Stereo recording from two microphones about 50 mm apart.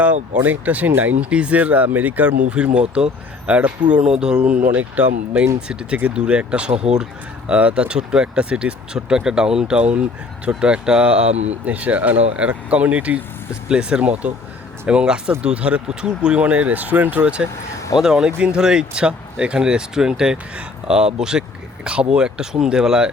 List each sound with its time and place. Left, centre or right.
0.3 s speech: right
5.5 s speech: centre; by 17.2 s right
17.9 s speech: centre